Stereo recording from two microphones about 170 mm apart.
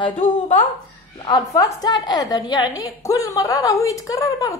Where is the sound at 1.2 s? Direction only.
20° left (ahead or behind).